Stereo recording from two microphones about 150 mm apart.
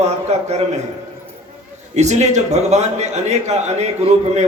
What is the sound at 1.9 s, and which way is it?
A man's voice, 50° right (ahead or behind).